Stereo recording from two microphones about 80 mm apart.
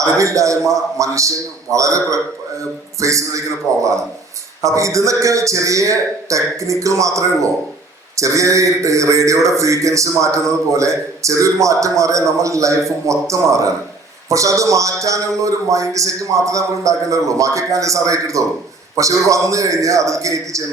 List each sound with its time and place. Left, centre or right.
0.0 s a man's voice: right
4.6 s a man's voice: right